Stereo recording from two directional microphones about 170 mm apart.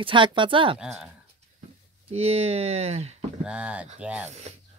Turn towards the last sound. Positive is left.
turn(degrees=-5)  # may be behind; listen again after turning